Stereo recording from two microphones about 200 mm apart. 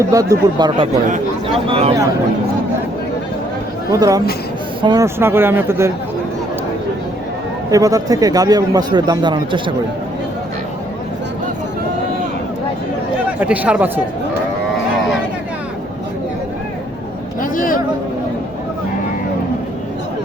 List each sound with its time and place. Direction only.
0.0 s a man's voice: 15° right (ahead or behind)
3.9 s speech: 15° right (ahead or behind)
7.7 s a man's voice: 15° right (ahead or behind)
13.4 s speech: 5° right (ahead or behind)
17.4 s a sound: 40° left (ahead or behind)